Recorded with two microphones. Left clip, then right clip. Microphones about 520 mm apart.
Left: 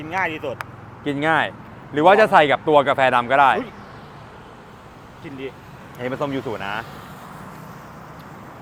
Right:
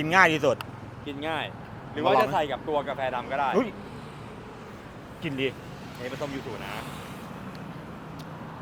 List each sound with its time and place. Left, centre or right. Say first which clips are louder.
0.0 s speech: right 4 dB; right
1.0 s speech: left 12 dB; left
5.2 s speech: right 4 dB; right
6.0 s speech: left 9 dB; left